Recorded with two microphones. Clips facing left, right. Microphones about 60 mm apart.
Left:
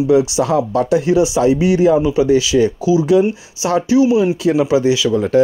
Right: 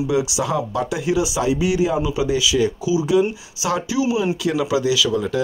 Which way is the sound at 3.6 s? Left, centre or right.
Left.